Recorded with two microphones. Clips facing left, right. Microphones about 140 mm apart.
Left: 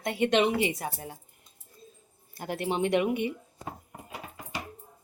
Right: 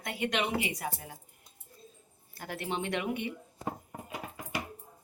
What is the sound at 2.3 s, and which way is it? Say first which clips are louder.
Speech: left 5 dB; 20° left (ahead or behind).